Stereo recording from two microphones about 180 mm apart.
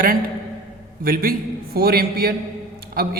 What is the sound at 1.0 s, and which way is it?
A man's voice, 55° right (ahead or behind).